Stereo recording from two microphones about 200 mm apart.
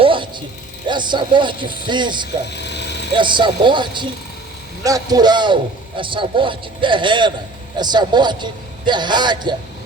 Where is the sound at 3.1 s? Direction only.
25° right (ahead or behind).